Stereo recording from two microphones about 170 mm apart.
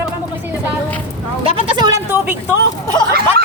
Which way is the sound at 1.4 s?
30° right (ahead or behind).